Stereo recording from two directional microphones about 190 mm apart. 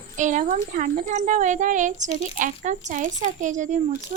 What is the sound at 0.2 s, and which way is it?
Speech, 40° right (ahead or behind).